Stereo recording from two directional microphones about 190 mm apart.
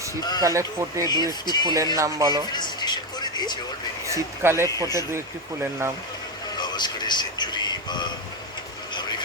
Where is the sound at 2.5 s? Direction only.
20° left (ahead or behind).